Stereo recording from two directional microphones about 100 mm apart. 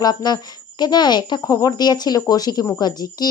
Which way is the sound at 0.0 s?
40° left (ahead or behind).